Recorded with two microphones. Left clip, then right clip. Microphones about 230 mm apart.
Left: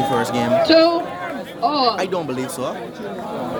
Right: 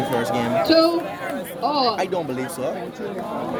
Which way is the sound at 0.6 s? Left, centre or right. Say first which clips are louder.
Left 3 dB; left.